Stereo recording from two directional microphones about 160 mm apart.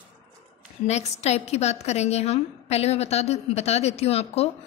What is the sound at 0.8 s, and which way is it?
A woman's voice, 45° left (ahead or behind).